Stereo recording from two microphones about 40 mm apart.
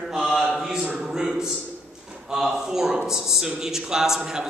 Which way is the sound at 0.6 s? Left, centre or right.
Centre.